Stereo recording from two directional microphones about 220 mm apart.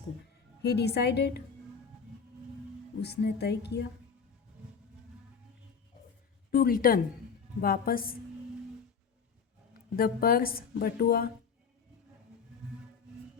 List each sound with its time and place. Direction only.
0.6 s speech: 50° left (ahead or behind)
3.0 s speech: 50° left (ahead or behind)
6.5 s a woman's voice: 40° left (ahead or behind)
9.9 s speech: 40° left (ahead or behind)